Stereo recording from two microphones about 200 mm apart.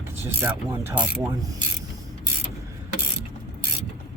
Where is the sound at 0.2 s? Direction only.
10° right (ahead or behind).